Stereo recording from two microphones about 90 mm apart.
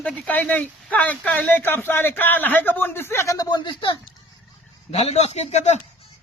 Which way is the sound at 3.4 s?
55° left (ahead or behind).